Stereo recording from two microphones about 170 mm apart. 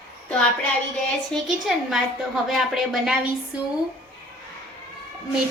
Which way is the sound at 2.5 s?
Centre (ahead or behind).